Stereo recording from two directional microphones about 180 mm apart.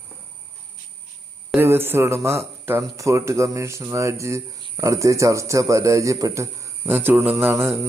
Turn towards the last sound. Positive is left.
turn(degrees=-10)  # may be behind; listen again after turning